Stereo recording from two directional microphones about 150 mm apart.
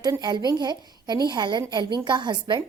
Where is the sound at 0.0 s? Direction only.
25° right (ahead or behind).